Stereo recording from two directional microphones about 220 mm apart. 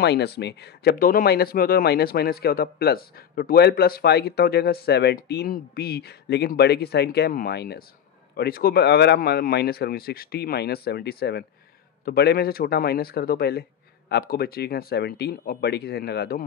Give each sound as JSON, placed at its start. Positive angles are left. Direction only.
{"t": 0.0, "sound": "speech", "side_deg": 50}